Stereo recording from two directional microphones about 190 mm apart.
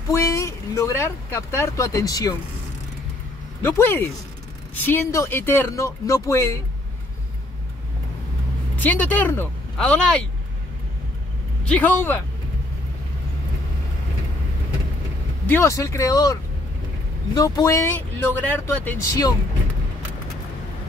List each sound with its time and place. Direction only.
0.1 s speech: 15° left (ahead or behind)
3.6 s speech: 10° left (ahead or behind)
8.7 s speech: 10° left (ahead or behind)
11.6 s speech: 5° left (ahead or behind)
15.4 s speech: 10° left (ahead or behind)